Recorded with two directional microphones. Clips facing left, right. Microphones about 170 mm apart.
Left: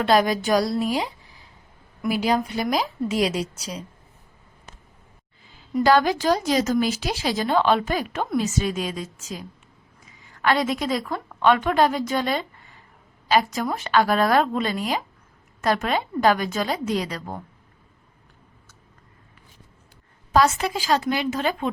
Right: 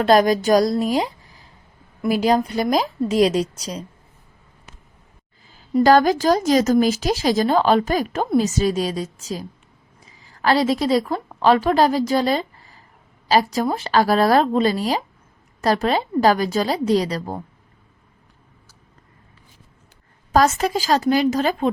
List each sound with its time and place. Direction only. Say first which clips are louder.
0.0 s speech: right 4 dB; 45° right (ahead or behind)
5.7 s a woman's voice: right 4 dB; 45° right (ahead or behind)
20.3 s speech: right 3 dB; 45° right (ahead or behind)